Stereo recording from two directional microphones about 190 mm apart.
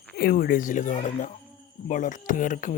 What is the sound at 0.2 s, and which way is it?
Speech, 50° left (ahead or behind).